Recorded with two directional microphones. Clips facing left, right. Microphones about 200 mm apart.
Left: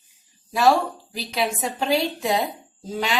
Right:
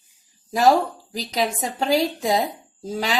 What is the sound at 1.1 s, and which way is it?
A woman's voice, 40° right (ahead or behind).